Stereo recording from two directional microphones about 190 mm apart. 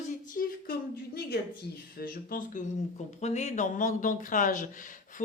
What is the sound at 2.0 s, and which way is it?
Speech, 45° left (ahead or behind).